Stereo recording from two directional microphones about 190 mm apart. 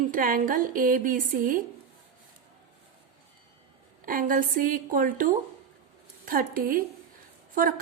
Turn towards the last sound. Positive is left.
turn(degrees=-50)  # may be behind; listen again after turning